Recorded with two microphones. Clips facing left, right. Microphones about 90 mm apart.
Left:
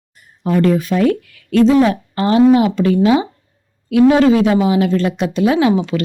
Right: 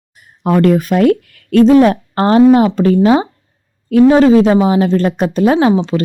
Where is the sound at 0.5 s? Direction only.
50° right (ahead or behind).